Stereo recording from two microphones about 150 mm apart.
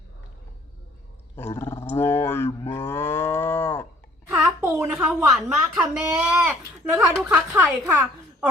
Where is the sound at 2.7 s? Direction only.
15° left (ahead or behind).